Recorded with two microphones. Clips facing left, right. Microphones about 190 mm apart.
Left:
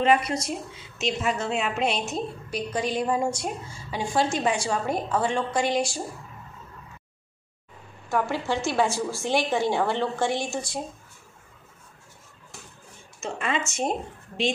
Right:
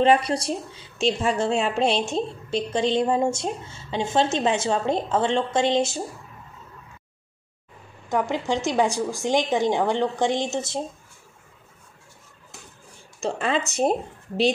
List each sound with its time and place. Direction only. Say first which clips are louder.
0.0 s a woman's voice: right 3 dB; 30° right (ahead or behind)
8.1 s a woman's voice: right 2 dB; 15° right (ahead or behind)
13.2 s speech: right 4 dB; 35° right (ahead or behind)